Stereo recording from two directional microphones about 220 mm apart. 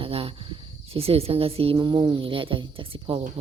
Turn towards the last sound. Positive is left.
turn(degrees=-25)  # may be behind; listen again after turning